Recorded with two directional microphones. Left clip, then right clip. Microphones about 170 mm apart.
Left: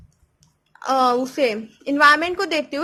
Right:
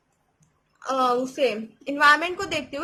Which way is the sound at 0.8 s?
50° left (ahead or behind).